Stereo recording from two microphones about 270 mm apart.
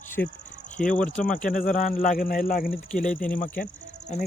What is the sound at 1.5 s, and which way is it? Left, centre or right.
Speech, left.